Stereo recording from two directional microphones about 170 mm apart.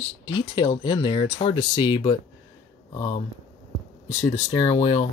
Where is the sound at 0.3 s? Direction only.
25° left (ahead or behind).